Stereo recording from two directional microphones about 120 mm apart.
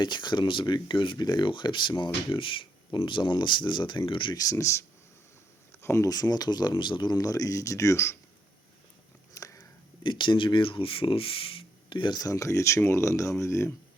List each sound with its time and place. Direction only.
0.0 s speech: 40° left (ahead or behind)
9.3 s a sound: 25° left (ahead or behind)
10.0 s speech: 40° left (ahead or behind); by 13.7 s 25° left (ahead or behind)